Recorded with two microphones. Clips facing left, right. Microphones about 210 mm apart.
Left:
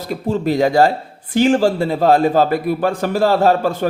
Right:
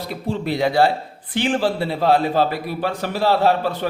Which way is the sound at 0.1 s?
45° left (ahead or behind).